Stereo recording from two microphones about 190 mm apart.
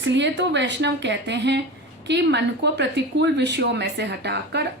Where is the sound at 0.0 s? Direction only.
70° right (ahead or behind).